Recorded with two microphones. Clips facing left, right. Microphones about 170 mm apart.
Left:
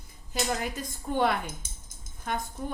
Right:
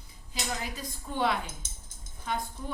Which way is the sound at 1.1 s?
50° left (ahead or behind).